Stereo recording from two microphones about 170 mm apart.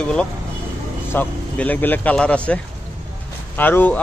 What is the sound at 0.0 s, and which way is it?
Speech, 5° left (ahead or behind).